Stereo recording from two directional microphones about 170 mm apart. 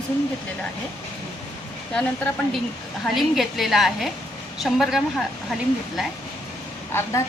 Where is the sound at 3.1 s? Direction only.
Centre (ahead or behind).